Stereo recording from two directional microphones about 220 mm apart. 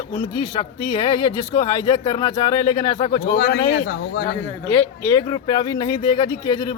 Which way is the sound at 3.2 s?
45° left (ahead or behind).